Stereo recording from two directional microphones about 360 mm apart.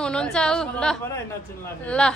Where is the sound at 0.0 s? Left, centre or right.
Centre.